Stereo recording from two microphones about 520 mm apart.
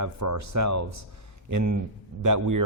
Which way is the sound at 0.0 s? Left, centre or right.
Right.